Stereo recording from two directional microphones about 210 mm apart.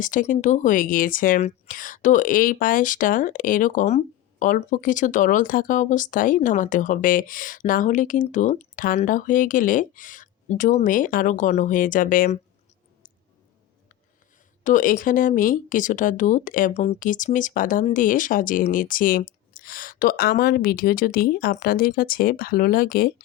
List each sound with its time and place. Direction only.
0.0 s speech: 40° left (ahead or behind)
14.6 s speech: 40° left (ahead or behind)